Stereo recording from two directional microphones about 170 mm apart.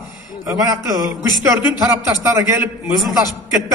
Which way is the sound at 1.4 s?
15° right (ahead or behind).